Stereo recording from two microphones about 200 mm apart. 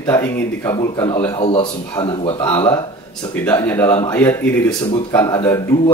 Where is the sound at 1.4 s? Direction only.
30° left (ahead or behind).